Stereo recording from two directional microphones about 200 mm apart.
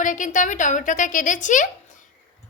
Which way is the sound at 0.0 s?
40° left (ahead or behind).